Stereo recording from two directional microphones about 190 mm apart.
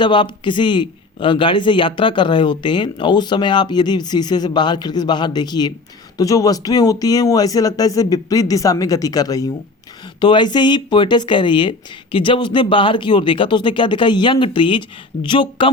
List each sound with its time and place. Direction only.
0.0 s a man's voice: 25° left (ahead or behind)